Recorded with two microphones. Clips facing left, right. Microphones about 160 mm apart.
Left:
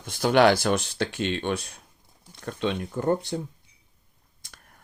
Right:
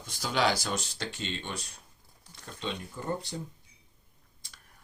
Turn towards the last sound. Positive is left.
turn(degrees=60)  # may be behind; listen again after turning